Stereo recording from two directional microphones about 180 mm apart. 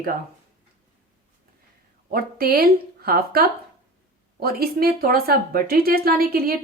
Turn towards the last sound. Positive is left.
turn(degrees=-55)  # may be behind; listen again after turning